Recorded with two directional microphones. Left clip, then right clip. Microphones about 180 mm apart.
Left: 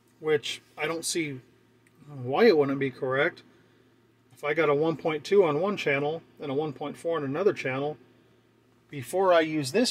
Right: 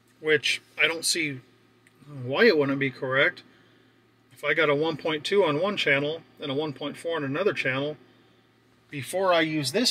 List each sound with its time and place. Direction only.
0.8 s speech: 20° left (ahead or behind)
8.9 s speech: 30° left (ahead or behind)